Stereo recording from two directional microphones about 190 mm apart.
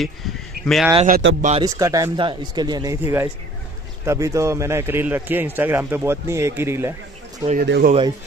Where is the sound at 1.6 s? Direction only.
15° right (ahead or behind).